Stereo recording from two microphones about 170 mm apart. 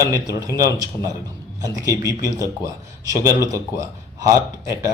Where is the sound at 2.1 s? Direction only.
20° left (ahead or behind).